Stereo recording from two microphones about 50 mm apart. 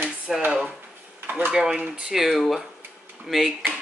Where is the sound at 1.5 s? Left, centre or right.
Centre.